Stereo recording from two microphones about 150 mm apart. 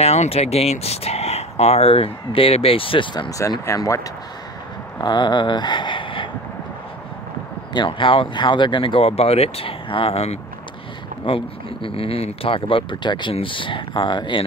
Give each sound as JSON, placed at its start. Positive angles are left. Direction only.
{"t": 0.0, "sound": "speech", "side_deg": 45}
{"t": 5.0, "sound": "speech", "side_deg": 30}
{"t": 7.7, "sound": "speech", "side_deg": 35}